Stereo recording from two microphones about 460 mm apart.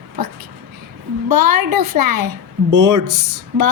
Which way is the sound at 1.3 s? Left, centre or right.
Right.